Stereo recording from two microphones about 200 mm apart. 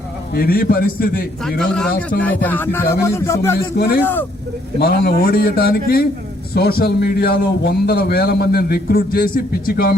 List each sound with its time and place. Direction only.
0.3 s a man's voice: 50° left (ahead or behind)
1.5 s speech: 5° left (ahead or behind)
4.8 s a man's voice: 55° left (ahead or behind)